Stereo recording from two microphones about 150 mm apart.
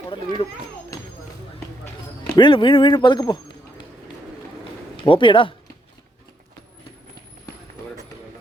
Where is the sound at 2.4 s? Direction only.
35° left (ahead or behind).